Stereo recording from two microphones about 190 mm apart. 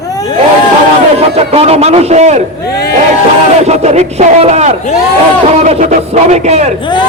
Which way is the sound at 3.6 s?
35° right (ahead or behind).